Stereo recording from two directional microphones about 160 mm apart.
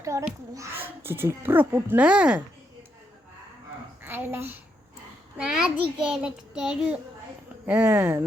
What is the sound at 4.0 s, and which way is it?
Speech, 15° right (ahead or behind).